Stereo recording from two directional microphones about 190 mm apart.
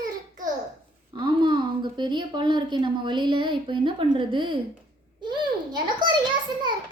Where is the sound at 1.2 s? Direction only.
25° right (ahead or behind).